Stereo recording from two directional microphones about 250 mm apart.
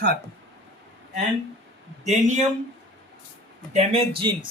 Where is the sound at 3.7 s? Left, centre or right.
Right.